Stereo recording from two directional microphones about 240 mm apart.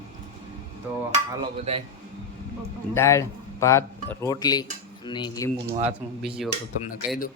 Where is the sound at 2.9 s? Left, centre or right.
Centre.